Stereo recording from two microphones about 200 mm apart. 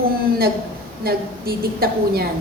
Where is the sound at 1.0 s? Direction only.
50° right (ahead or behind).